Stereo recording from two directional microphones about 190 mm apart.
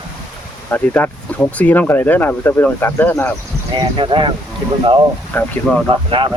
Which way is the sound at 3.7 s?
25° right (ahead or behind).